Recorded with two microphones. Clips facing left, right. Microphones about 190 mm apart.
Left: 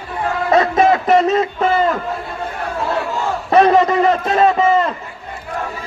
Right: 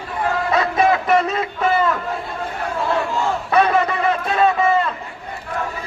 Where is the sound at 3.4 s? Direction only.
35° left (ahead or behind).